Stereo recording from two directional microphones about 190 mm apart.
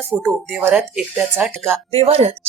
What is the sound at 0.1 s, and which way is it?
Speech, 5° right (ahead or behind).